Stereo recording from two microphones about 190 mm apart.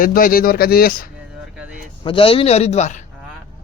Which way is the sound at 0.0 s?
45° left (ahead or behind).